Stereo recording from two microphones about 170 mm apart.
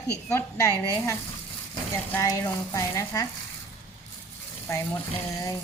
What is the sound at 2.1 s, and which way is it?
A woman's voice, 20° left (ahead or behind).